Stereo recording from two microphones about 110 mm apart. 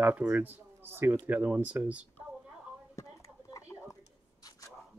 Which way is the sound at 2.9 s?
30° left (ahead or behind).